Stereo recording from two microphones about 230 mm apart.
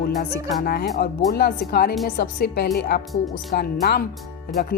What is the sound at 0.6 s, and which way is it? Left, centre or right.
A woman's voice, left.